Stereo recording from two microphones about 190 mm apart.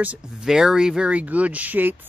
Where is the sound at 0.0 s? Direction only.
5° right (ahead or behind).